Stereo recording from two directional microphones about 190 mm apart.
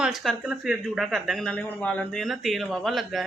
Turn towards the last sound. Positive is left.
turn(degrees=0)  # may be behind; listen again after turning